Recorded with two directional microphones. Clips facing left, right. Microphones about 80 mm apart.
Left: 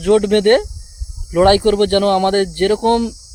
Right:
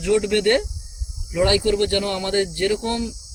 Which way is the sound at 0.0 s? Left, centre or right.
Left.